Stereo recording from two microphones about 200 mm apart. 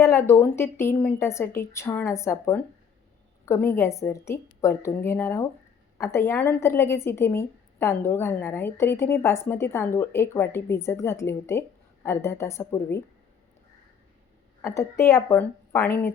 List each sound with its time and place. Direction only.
0.0 s a woman's voice: 15° left (ahead or behind)
14.6 s a woman's voice: 15° left (ahead or behind)